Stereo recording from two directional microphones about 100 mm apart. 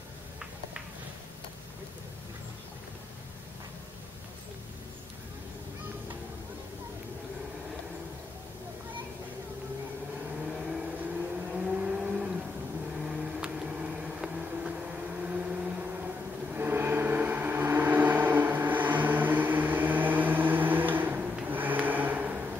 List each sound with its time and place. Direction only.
10.5 s vehicle: 5° right (ahead or behind)
13.0 s a sound: 5° right (ahead or behind)
16.5 s gong: 20° right (ahead or behind)